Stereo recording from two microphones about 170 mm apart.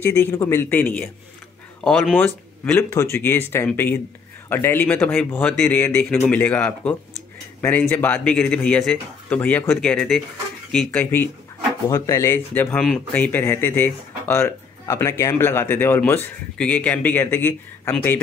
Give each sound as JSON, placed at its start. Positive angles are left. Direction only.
{"t": 0.0, "sound": "speech", "side_deg": 10}
{"t": 2.1, "sound": "speech", "side_deg": 10}